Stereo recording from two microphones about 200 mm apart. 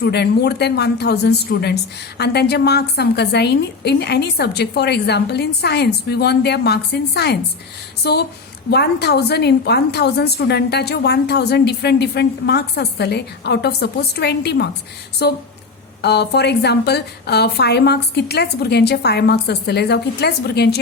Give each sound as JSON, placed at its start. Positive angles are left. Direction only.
{"t": 0.0, "sound": "a woman's voice", "side_deg": 55}